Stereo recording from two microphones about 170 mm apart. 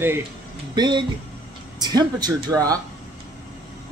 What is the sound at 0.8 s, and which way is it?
Speech, 25° right (ahead or behind).